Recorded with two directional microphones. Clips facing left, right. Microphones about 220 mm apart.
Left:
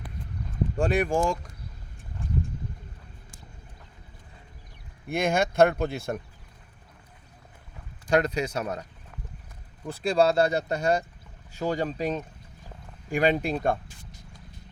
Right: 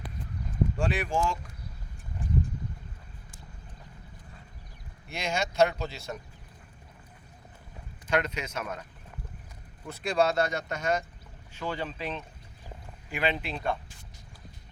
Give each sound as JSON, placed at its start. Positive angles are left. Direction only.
{"t": 0.8, "sound": "speech", "side_deg": 50}
{"t": 5.0, "sound": "speech", "side_deg": 55}
{"t": 8.1, "sound": "speech", "side_deg": 35}
{"t": 9.8, "sound": "speech", "side_deg": 30}